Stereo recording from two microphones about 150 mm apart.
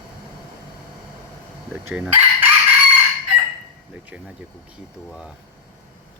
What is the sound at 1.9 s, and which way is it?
Chicken, 10° right (ahead or behind).